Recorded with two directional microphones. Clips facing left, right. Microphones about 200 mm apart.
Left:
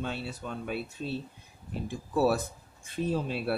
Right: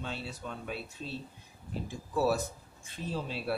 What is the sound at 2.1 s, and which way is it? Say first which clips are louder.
Speech: left 3 dB; 60° left (ahead or behind).